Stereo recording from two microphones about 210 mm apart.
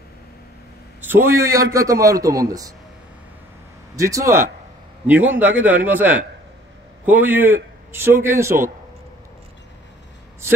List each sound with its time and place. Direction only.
1.0 s a man's voice: 10° right (ahead or behind)
3.9 s a man's voice: 15° right (ahead or behind)